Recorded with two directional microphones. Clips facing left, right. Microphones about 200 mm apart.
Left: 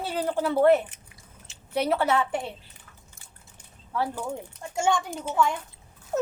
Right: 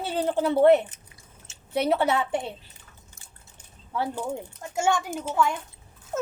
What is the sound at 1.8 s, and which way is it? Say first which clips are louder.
Speech: right 1 dB; 25° right (ahead or behind).